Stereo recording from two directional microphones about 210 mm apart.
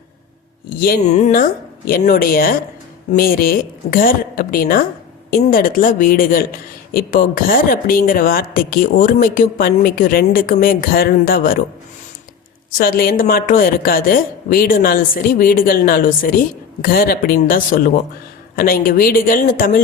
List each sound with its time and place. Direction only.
0.8 s speech: 45° left (ahead or behind)
12.7 s speech: 45° left (ahead or behind)